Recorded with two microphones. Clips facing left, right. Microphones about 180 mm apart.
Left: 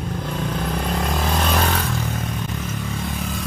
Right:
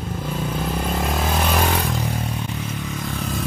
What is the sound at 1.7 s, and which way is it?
Vehicle, 15° right (ahead or behind).